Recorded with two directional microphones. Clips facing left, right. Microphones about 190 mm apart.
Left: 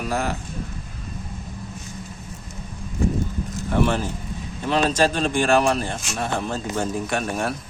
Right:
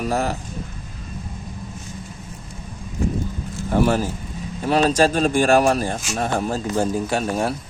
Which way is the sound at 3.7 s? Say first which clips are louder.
Right 3 dB; 40° right (ahead or behind).